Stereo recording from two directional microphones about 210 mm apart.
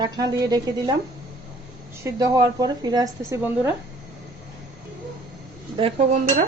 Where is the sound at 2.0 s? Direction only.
20° right (ahead or behind).